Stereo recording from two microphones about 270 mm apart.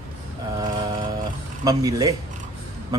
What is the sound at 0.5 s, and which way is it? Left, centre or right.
Speech, centre.